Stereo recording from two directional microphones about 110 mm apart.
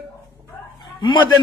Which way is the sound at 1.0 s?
45° left (ahead or behind).